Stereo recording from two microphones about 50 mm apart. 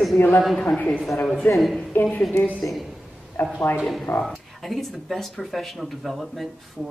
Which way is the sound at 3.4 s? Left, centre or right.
Left.